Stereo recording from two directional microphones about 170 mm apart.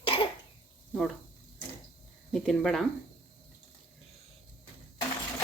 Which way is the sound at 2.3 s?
Centre (ahead or behind).